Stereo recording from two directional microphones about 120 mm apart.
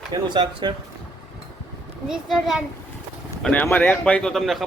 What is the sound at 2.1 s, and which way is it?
Speech, centre (ahead or behind).